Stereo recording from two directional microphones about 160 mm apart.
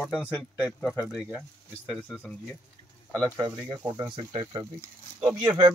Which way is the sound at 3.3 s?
20° right (ahead or behind).